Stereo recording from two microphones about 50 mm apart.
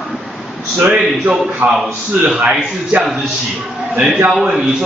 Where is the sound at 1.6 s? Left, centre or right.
Right.